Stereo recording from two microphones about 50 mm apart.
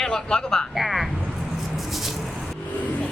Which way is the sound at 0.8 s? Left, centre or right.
Centre.